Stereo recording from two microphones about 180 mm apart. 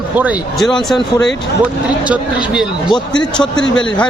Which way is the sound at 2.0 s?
5° right (ahead or behind).